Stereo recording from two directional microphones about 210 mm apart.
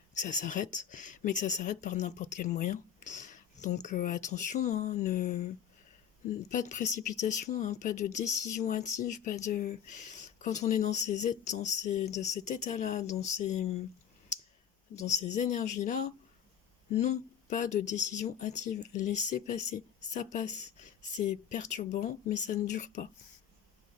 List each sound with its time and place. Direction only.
0.1 s speech: 35° left (ahead or behind)
6.5 s speech: 35° left (ahead or behind)
14.9 s speech: 35° left (ahead or behind)